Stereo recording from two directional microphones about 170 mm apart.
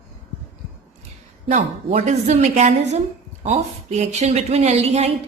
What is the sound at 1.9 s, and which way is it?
A woman's voice, 45° right (ahead or behind).